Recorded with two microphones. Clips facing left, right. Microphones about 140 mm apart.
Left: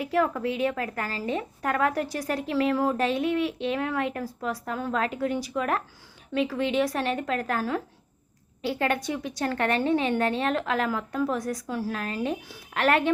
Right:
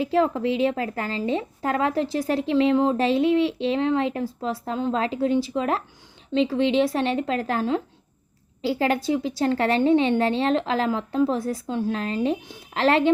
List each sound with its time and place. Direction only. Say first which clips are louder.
0.0 s a woman's voice: right 4 dB; 25° right (ahead or behind)